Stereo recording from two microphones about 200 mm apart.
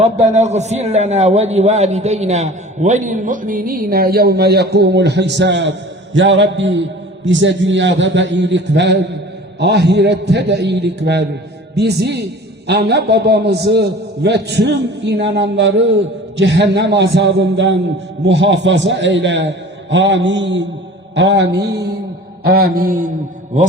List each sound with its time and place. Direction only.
0.0 s a man's voice: 35° right (ahead or behind); by 21.9 s 55° right (ahead or behind)
22.4 s mantra: 50° right (ahead or behind)